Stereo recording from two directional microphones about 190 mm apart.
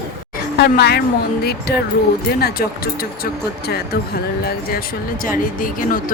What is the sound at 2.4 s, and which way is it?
Speech, 50° left (ahead or behind).